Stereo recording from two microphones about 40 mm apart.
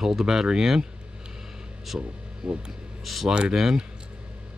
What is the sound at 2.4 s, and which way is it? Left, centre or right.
Speech, right.